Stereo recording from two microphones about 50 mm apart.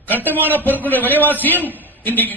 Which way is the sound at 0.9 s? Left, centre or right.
Left.